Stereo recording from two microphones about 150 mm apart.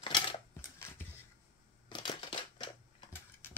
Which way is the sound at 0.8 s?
15° left (ahead or behind).